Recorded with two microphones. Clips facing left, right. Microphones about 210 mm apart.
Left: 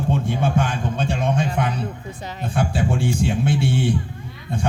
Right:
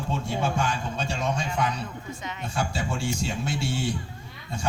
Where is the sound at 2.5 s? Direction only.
55° left (ahead or behind).